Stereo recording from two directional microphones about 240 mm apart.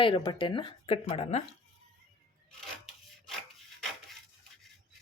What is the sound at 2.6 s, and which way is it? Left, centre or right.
Filing, centre.